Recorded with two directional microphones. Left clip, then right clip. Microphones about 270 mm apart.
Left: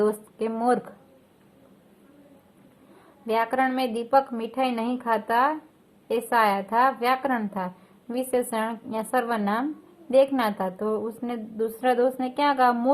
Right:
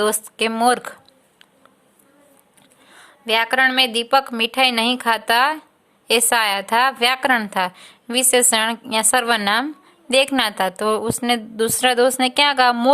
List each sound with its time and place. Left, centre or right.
0.0 s a woman's voice: right
3.2 s a woman's voice: right